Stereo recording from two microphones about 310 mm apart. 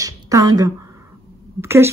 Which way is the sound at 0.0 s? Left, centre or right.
Centre.